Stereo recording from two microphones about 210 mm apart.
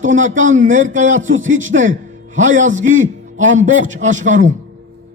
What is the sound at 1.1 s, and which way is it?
A man's voice, 35° right (ahead or behind).